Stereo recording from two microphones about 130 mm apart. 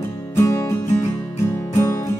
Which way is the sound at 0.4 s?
20° left (ahead or behind).